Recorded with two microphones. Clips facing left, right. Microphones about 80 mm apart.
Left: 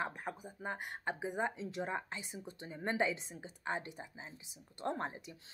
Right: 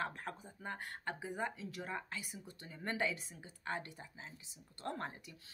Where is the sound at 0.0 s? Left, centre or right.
Centre.